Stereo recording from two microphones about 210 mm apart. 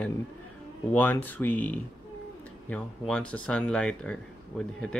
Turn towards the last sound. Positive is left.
turn(degrees=5)  # may be behind; listen again after turning